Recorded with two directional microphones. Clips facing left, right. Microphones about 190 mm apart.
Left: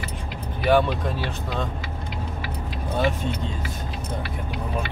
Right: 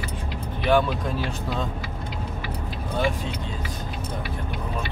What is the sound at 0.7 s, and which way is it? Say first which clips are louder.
Speech: left 1 dB; centre (ahead or behind).